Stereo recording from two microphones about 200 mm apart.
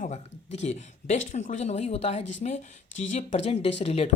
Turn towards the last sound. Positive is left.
turn(degrees=30)  # may be behind; listen again after turning